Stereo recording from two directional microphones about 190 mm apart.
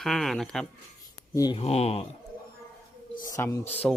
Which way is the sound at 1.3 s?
20° left (ahead or behind).